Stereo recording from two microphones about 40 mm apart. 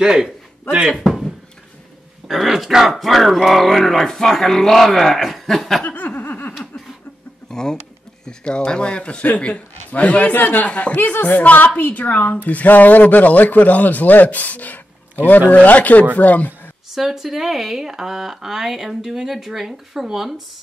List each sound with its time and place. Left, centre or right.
0.0 s speech: centre
1.0 s a sound: centre
2.2 s speech: centre
5.9 s a sound: left
7.4 s bird: centre
8.3 s speech: left
10.3 s a man's voice: left
10.7 s speech: left
11.2 s a man's voice: left
16.9 s speech: centre